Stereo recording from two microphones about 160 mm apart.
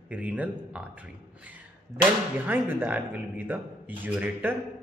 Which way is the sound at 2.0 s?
10° right (ahead or behind).